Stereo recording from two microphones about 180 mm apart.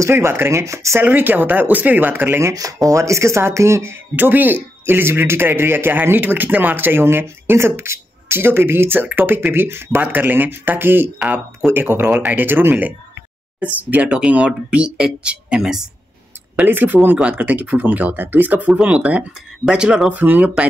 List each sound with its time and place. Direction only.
0.0 s speech: 15° right (ahead or behind)